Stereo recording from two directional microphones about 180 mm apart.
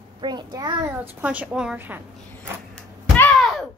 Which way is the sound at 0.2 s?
25° right (ahead or behind).